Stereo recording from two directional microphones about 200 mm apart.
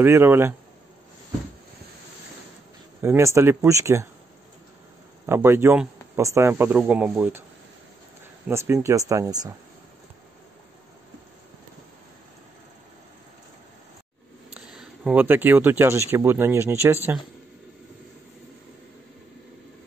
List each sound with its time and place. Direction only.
0.0 s speech: 10° right (ahead or behind)
3.0 s speech: 15° right (ahead or behind)
5.2 s speech: 10° right (ahead or behind)
8.5 s speech: 15° right (ahead or behind)
14.5 s speech: 5° right (ahead or behind)